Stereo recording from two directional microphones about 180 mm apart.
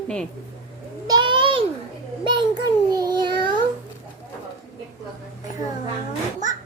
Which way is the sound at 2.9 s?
20° right (ahead or behind).